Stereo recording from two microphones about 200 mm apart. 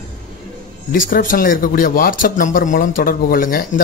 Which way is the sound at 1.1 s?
45° left (ahead or behind).